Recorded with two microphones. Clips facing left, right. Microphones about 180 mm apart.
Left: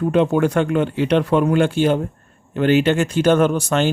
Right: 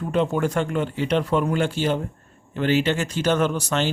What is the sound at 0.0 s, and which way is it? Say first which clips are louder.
Speech: left 6 dB; 65° left (ahead or behind).